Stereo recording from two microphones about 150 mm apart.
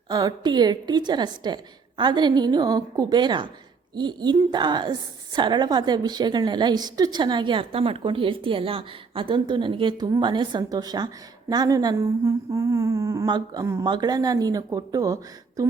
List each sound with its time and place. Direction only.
0.1 s a woman's voice: 25° right (ahead or behind)